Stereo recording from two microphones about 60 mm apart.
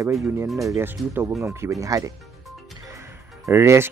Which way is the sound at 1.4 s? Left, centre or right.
Right.